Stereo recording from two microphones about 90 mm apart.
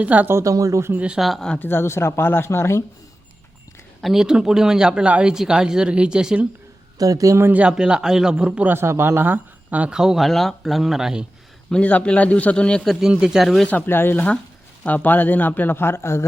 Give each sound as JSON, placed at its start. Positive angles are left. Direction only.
{"t": 0.0, "sound": "speech", "side_deg": -15}
{"t": 0.3, "sound": "speech", "side_deg": -35}
{"t": 0.9, "sound": "speech", "side_deg": -10}
{"t": 1.2, "sound": "speech", "side_deg": 0}
{"t": 1.5, "sound": "speech", "side_deg": 25}
{"t": 4.0, "sound": "speech", "side_deg": -5}
{"t": 7.0, "sound": "speech", "side_deg": -40}
{"t": 7.5, "sound": "speech", "side_deg": -10}
{"t": 8.7, "sound": "speech", "side_deg": -25}
{"t": 11.7, "sound": "a man's voice", "side_deg": 15}
{"t": 13.7, "sound": "speech", "side_deg": 20}